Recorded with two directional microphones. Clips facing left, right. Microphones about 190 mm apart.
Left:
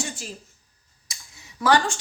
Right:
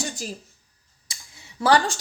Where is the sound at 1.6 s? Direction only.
35° right (ahead or behind).